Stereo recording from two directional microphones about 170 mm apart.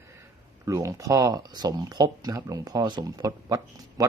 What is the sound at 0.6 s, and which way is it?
Speech, 20° right (ahead or behind).